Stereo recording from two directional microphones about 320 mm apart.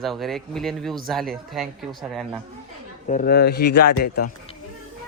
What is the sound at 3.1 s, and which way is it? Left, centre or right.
Speech, left.